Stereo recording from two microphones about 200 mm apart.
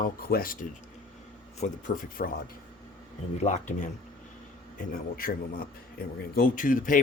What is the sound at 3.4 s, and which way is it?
A man's voice, 35° left (ahead or behind).